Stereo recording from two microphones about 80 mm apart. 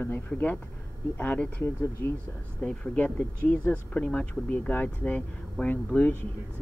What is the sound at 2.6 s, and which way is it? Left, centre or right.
Speech, centre.